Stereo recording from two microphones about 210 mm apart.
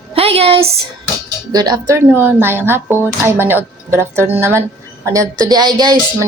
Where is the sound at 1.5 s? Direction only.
20° right (ahead or behind).